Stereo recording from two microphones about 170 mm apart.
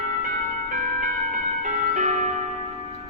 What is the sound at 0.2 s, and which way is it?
Music, 50° right (ahead or behind).